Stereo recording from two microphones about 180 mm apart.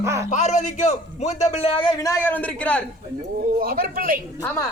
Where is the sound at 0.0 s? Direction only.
15° right (ahead or behind).